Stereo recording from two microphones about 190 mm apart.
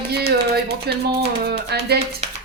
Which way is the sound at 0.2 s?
55° right (ahead or behind).